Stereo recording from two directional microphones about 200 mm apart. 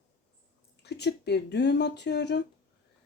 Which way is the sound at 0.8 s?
55° left (ahead or behind).